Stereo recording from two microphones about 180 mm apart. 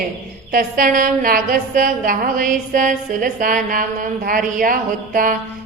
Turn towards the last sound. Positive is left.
turn(degrees=-50)  # may be behind; listen again after turning